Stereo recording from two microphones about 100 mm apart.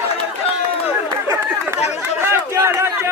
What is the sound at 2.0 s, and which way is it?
Chatter, 20° right (ahead or behind).